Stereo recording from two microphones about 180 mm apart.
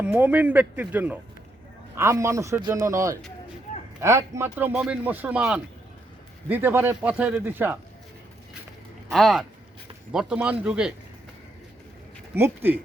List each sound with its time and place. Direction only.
0.0 s speech: 10° right (ahead or behind)
9.1 s speech: centre (ahead or behind)
12.3 s speech: 10° right (ahead or behind)